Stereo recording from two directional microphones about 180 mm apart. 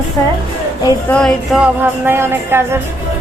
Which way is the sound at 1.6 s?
10° right (ahead or behind).